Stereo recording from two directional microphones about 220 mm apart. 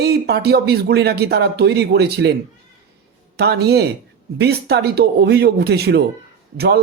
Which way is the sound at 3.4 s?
50° right (ahead or behind).